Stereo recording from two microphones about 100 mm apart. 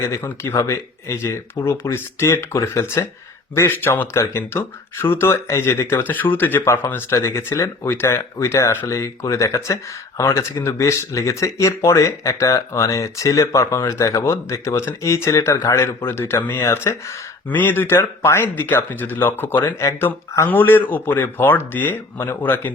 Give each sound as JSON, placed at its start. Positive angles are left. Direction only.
{"t": 0.0, "sound": "speech", "side_deg": 25}